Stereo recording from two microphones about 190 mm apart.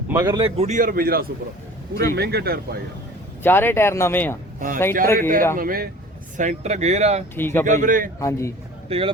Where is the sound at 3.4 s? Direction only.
10° left (ahead or behind).